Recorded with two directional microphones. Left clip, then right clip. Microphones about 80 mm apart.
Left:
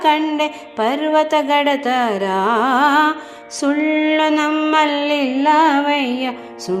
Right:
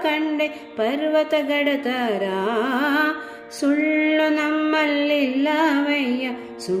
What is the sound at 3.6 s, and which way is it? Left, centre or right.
Music, left.